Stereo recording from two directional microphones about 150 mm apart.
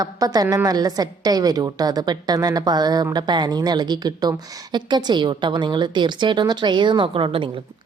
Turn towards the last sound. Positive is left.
turn(degrees=-35)  # may be behind; listen again after turning